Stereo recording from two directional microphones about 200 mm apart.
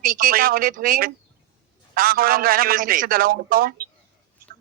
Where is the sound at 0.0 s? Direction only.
45° right (ahead or behind).